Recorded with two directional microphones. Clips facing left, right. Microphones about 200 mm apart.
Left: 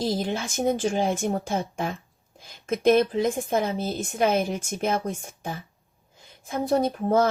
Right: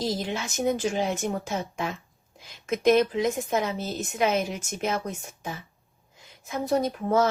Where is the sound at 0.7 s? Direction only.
30° left (ahead or behind).